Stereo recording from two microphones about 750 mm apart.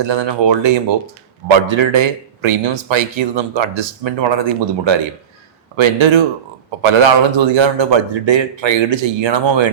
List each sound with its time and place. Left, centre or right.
0.0 s speech: right
1.7 s speech: right